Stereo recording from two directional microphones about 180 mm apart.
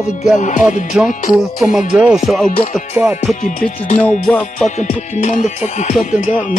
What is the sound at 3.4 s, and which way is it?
Music, 45° left (ahead or behind).